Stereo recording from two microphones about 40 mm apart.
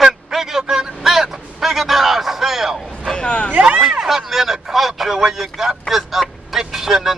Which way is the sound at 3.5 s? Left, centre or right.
Right.